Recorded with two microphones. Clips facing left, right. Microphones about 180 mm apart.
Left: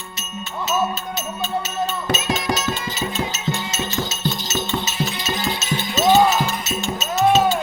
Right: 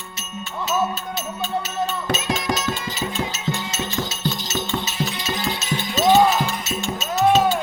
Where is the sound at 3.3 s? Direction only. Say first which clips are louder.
Left 1 dB; 20° left (ahead or behind).